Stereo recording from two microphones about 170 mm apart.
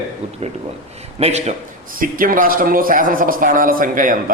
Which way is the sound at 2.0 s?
55° right (ahead or behind).